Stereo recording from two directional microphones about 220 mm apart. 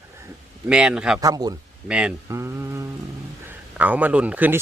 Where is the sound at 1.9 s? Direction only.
5° right (ahead or behind).